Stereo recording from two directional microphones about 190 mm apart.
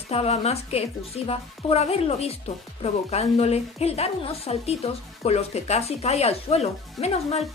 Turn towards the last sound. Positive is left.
turn(degrees=35)  # may be behind; listen again after turning